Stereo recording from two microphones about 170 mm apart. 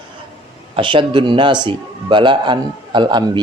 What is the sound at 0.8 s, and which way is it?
A man's voice, 30° right (ahead or behind).